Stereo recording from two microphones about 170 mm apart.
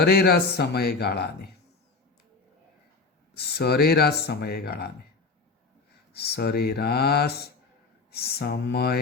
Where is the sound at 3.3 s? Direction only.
70° left (ahead or behind).